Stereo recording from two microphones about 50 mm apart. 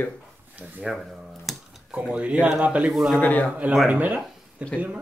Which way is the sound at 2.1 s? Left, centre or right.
Right.